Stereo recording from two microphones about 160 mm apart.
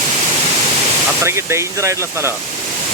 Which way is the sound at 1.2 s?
15° right (ahead or behind).